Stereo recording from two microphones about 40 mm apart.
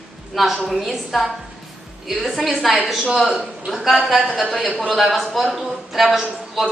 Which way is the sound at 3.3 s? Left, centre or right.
Right.